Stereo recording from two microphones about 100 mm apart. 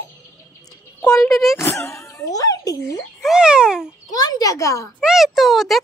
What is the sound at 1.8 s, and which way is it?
Speech, 30° left (ahead or behind).